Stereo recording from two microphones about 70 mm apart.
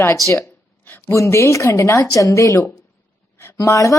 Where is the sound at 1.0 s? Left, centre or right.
Left.